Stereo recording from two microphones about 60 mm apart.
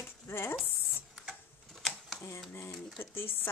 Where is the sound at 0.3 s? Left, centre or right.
Left.